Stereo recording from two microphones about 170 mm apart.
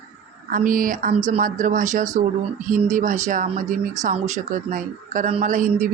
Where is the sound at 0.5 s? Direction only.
55° right (ahead or behind).